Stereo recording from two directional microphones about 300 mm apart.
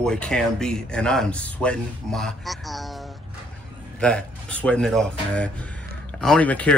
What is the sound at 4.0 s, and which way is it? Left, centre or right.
Speech, centre.